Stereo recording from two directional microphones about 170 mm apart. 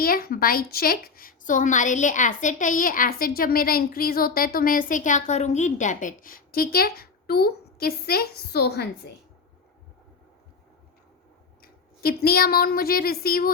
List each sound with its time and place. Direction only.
0.0 s a woman's voice: 60° left (ahead or behind)
11.6 s speech: 65° left (ahead or behind)